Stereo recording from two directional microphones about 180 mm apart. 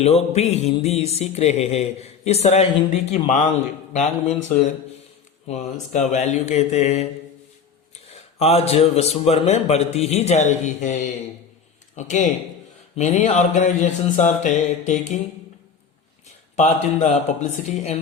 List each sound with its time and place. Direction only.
0.0 s music: 35° left (ahead or behind)
3.9 s speech: 40° left (ahead or behind)
5.5 s music: 40° left (ahead or behind)
8.4 s music: 35° left (ahead or behind)
11.9 s speech: 45° left (ahead or behind)
13.0 s music: 40° left (ahead or behind)
16.2 s speech: 40° left (ahead or behind)